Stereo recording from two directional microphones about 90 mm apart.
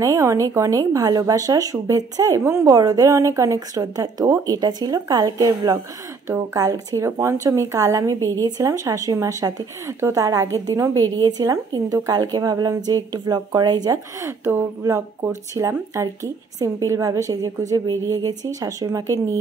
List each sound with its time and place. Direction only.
0.0 s speech: 35° right (ahead or behind)
2.7 s speech: 45° right (ahead or behind)
14.2 s speech: 25° right (ahead or behind)